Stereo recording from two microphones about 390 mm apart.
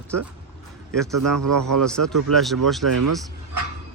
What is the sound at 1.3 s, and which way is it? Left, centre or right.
Speech, right.